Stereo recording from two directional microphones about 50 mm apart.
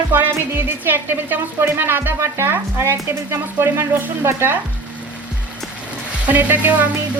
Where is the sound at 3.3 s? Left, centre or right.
Right.